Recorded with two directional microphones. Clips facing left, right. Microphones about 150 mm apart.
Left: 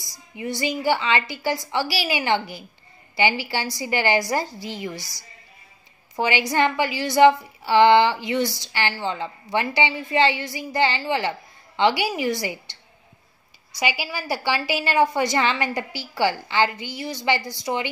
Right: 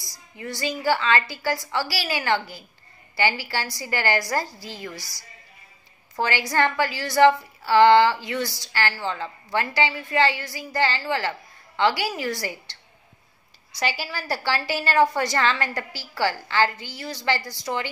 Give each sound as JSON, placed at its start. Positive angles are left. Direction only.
{"t": 0.0, "sound": "a woman's voice", "side_deg": 15}
{"t": 13.7, "sound": "a woman's voice", "side_deg": 15}